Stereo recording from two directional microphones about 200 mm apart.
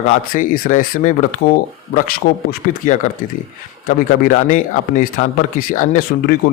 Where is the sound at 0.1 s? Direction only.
40° left (ahead or behind).